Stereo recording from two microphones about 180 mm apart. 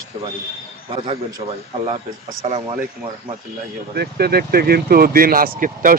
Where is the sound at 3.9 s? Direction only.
60° right (ahead or behind).